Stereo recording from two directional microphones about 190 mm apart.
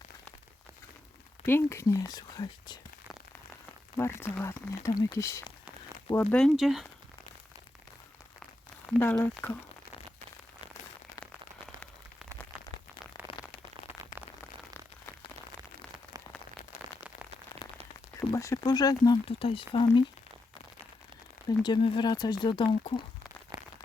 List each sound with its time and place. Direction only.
1.5 s speech: 15° left (ahead or behind)
3.9 s speech: 15° left (ahead or behind)
9.0 s speech: 15° left (ahead or behind)
13.2 s a sound: 10° right (ahead or behind)
18.2 s speech: 15° left (ahead or behind)
21.6 s speech: 25° left (ahead or behind)
23.5 s a sound: 20° right (ahead or behind)